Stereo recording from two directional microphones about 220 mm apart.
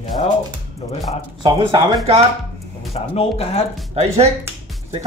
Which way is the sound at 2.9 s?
25° left (ahead or behind).